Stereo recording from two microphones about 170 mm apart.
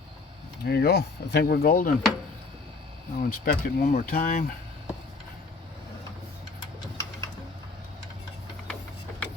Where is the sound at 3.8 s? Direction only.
55° left (ahead or behind).